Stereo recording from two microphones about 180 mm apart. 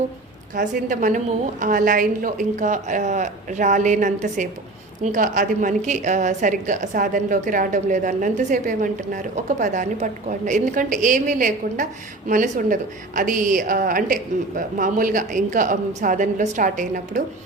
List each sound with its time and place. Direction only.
0.5 s a woman's voice: 45° right (ahead or behind)